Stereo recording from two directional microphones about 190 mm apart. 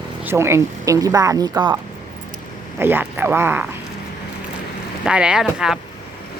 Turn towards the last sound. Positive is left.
turn(degrees=-5)  # may be behind; listen again after turning